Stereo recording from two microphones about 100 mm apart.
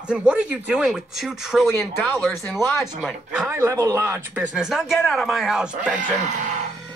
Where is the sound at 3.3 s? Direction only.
20° right (ahead or behind).